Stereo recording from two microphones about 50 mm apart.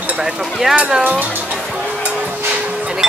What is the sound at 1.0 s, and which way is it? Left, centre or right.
Speech, right.